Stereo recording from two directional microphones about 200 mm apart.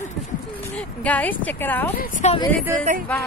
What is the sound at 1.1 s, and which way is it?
Speech, 5° left (ahead or behind).